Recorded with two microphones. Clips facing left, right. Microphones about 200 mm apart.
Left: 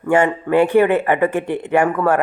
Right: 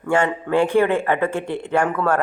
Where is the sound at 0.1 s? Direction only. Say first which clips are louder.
Left 4 dB; 15° left (ahead or behind).